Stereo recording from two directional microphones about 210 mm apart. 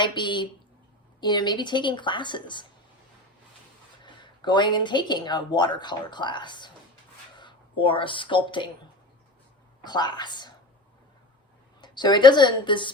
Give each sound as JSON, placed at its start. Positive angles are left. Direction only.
{"t": 0.0, "sound": "speech", "side_deg": 20}
{"t": 4.0, "sound": "speech", "side_deg": 20}
{"t": 9.8, "sound": "speech", "side_deg": 20}
{"t": 11.8, "sound": "a woman's voice", "side_deg": 20}